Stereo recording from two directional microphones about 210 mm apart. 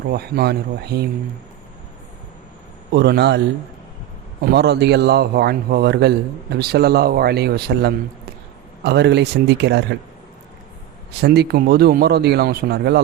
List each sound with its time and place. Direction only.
0.1 s a man's voice: 50° right (ahead or behind)
2.9 s a man's voice: 50° right (ahead or behind)
4.4 s a man's voice: 50° right (ahead or behind)
11.2 s a man's voice: 50° right (ahead or behind)